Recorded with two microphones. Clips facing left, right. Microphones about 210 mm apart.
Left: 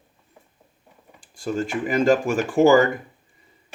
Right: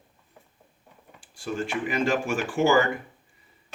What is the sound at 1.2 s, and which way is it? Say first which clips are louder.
Speech: left 5 dB; 45° left (ahead or behind).